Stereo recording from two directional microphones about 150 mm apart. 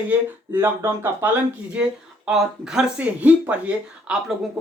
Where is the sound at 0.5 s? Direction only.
15° right (ahead or behind).